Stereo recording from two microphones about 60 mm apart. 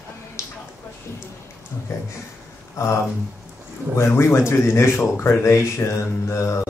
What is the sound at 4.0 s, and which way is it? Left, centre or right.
Speech, left.